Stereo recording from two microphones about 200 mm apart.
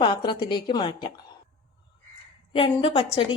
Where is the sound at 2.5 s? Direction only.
25° left (ahead or behind).